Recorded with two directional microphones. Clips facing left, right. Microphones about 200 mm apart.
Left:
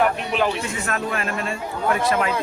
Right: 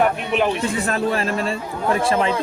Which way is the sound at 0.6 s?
35° right (ahead or behind).